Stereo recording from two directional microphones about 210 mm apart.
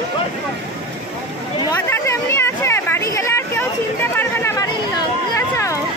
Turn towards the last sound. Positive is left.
turn(degrees=15)  # may be behind; listen again after turning